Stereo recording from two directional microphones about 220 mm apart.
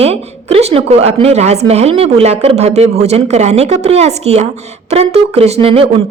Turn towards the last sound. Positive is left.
turn(degrees=-25)  # may be behind; listen again after turning